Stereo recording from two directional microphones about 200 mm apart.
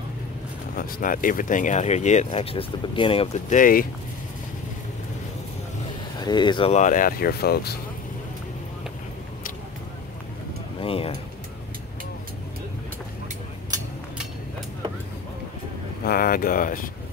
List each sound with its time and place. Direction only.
0.7 s speech: 45° left (ahead or behind)
6.1 s speech: 20° left (ahead or behind); by 7.7 s 50° left (ahead or behind)
10.8 s speech: 25° left (ahead or behind)
16.1 s speech: 45° left (ahead or behind)